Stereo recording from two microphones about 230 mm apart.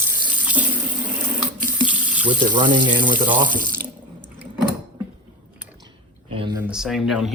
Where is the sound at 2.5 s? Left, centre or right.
Centre.